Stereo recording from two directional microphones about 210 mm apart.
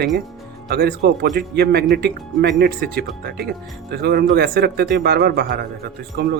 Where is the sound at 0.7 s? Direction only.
50° right (ahead or behind).